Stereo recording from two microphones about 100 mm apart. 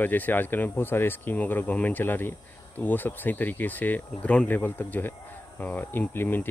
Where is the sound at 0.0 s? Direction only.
20° left (ahead or behind).